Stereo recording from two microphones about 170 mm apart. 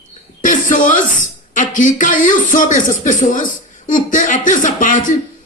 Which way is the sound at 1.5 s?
50° left (ahead or behind).